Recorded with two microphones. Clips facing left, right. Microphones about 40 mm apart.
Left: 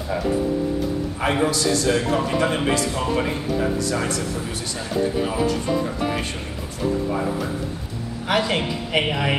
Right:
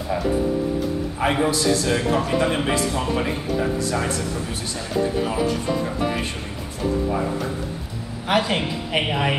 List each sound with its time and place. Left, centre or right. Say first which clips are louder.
1.2 s a man's voice: even; centre
1.6 s a man's voice: right 1 dB; centre
1.9 s a man's voice: even; centre
8.3 s a man's voice: right 1 dB; centre